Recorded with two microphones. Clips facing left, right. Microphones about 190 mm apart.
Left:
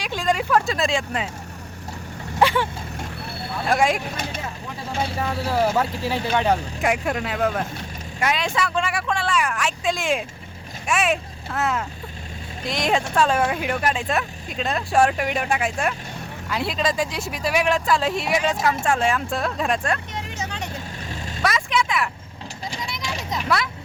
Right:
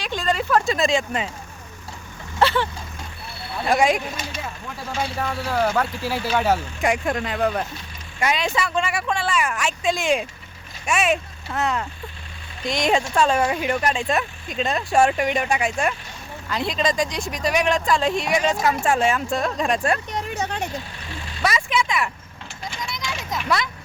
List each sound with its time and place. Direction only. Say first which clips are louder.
0.0 s speech: left 1 dB; 10° left (ahead or behind)
0.6 s speech: right 2 dB; centre (ahead or behind)
2.4 s speech: even; 10° left (ahead or behind)
3.6 s speech: right 2 dB; centre (ahead or behind)
5.1 s speech: left 2 dB; centre (ahead or behind)
6.9 s speech: right 1 dB; 5° left (ahead or behind)
20.3 s speech: right 5 dB; 60° right (ahead or behind)
21.1 s vehicle: left 2 dB; 45° left (ahead or behind)
21.4 s a sound: even; centre (ahead or behind)